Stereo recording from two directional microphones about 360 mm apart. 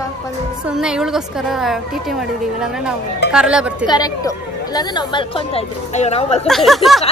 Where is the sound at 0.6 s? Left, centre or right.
Centre.